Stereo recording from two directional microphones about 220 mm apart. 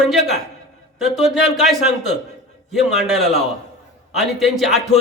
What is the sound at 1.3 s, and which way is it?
A man's voice, centre (ahead or behind).